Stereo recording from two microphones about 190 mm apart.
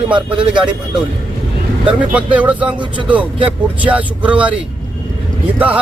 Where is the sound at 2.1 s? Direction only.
5° right (ahead or behind).